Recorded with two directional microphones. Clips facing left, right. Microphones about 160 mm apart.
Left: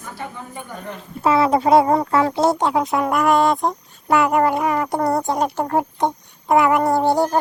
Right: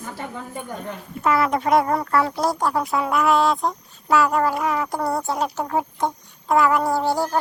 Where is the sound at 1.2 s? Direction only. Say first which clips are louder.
Left 4 dB; 30° left (ahead or behind).